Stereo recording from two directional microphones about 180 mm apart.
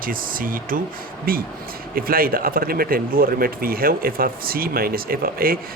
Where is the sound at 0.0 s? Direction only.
50° right (ahead or behind).